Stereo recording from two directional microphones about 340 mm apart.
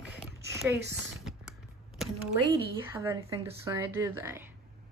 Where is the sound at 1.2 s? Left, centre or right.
Centre.